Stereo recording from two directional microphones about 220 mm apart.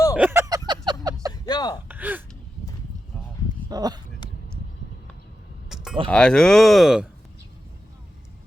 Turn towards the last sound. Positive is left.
turn(degrees=0)  # may be behind; listen again after turning